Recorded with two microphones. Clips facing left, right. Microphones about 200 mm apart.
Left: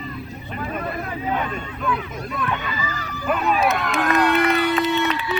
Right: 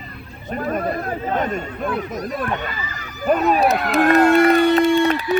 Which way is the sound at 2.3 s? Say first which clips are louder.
Right 2 dB; 40° right (ahead or behind).